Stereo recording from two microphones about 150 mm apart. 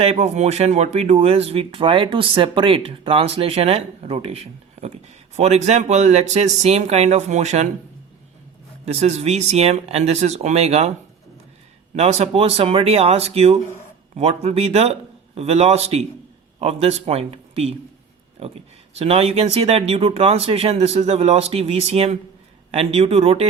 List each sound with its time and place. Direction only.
0.0 s speech: 45° right (ahead or behind)
8.8 s speech: 45° right (ahead or behind)
11.9 s speech: 45° right (ahead or behind)
18.9 s speech: 40° right (ahead or behind)